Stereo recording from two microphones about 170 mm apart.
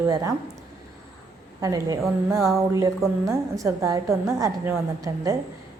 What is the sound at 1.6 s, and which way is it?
A woman's voice, 20° right (ahead or behind).